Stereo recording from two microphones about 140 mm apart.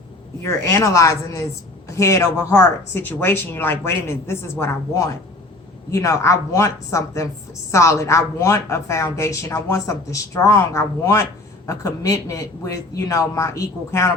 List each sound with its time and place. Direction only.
0.4 s a woman's voice: 20° left (ahead or behind)